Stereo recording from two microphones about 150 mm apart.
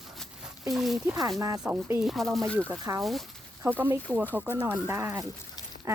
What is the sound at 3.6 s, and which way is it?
Speech, 10° right (ahead or behind).